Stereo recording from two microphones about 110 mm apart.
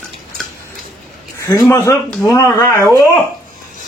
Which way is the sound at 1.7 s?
25° left (ahead or behind).